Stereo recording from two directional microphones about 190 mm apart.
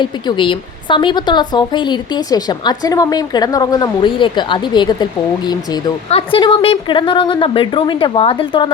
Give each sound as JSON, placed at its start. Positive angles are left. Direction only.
{"t": 0.0, "sound": "a woman's voice", "side_deg": 25}